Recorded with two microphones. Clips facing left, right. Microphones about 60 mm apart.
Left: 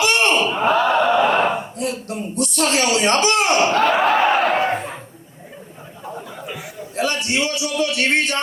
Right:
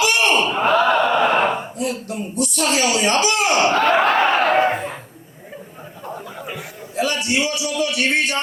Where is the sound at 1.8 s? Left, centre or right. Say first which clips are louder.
Even; left.